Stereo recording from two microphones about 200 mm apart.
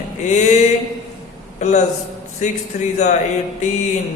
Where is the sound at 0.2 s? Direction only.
35° left (ahead or behind).